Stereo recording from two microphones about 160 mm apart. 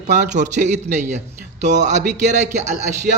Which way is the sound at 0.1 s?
50° right (ahead or behind).